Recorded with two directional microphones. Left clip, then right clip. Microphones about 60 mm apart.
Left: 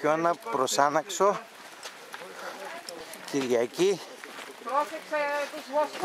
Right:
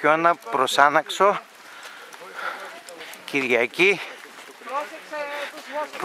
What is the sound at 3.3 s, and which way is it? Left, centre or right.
Speech, centre.